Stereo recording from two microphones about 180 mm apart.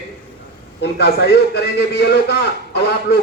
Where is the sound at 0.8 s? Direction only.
65° left (ahead or behind).